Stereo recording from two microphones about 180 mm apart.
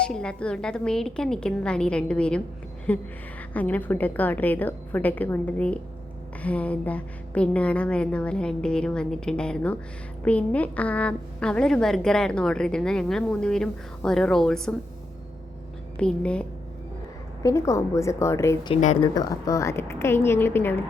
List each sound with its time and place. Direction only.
0.0 s a woman's voice: 5° left (ahead or behind)
16.0 s a woman's voice: 5° left (ahead or behind)
17.4 s a woman's voice: 15° left (ahead or behind)
18.7 s speech: 35° left (ahead or behind)
19.1 s a woman's voice: 20° left (ahead or behind)